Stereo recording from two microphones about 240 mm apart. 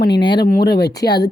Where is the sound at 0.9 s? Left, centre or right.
Centre.